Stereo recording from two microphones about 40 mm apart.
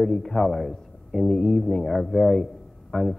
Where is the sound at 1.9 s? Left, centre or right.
Centre.